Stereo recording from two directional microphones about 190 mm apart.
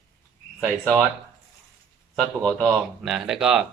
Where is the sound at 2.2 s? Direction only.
5° left (ahead or behind).